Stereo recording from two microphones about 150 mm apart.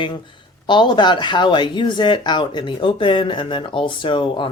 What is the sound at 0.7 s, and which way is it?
Speech, 30° left (ahead or behind).